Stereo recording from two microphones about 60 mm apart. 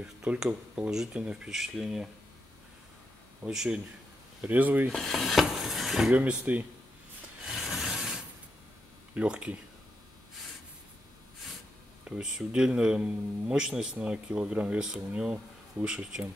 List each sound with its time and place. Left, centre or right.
0.0 s a man's voice: centre
1.5 s a man's voice: centre
3.4 s a man's voice: centre
4.5 s speech: right
4.8 s dishes: centre
6.1 s speech: right
7.4 s a sound: centre
9.1 s speech: right
12.1 s a man's voice: centre